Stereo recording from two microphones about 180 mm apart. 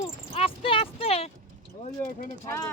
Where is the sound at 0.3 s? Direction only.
30° left (ahead or behind).